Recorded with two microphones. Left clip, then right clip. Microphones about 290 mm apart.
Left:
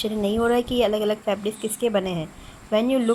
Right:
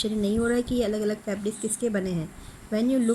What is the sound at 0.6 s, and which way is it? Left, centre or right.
Speech, centre.